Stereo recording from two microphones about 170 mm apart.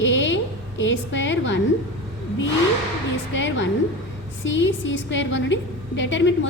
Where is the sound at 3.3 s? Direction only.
90° left.